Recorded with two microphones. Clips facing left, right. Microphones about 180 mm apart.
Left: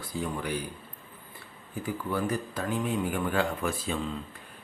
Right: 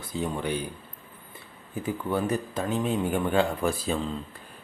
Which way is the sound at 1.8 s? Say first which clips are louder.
Right 3 dB; 25° right (ahead or behind).